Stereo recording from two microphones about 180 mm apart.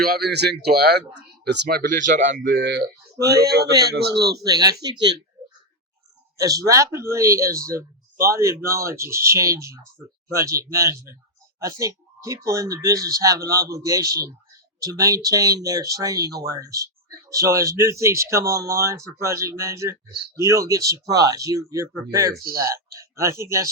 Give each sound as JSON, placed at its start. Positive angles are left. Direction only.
{"t": 0.3, "sound": "speech", "side_deg": -65}
{"t": 2.4, "sound": "speech", "side_deg": -55}
{"t": 3.2, "sound": "speech", "side_deg": -20}
{"t": 3.4, "sound": "speech", "side_deg": -65}
{"t": 4.4, "sound": "speech", "side_deg": -20}
{"t": 6.3, "sound": "speech", "side_deg": -20}